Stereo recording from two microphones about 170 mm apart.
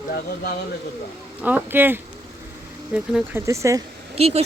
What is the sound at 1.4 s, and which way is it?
A man's voice, 10° right (ahead or behind).